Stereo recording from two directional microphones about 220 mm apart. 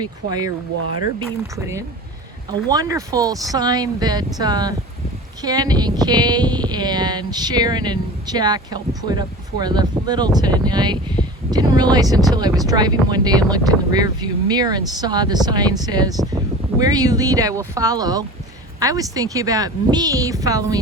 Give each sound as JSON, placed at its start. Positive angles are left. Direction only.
{"t": 0.0, "sound": "speech", "side_deg": -20}
{"t": 1.5, "sound": "speech", "side_deg": -15}